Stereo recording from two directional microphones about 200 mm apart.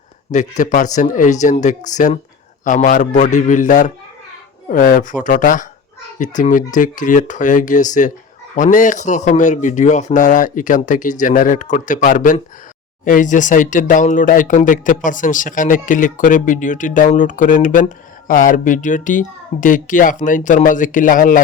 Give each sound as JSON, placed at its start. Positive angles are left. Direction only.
{"t": 0.3, "sound": "speech", "side_deg": 40}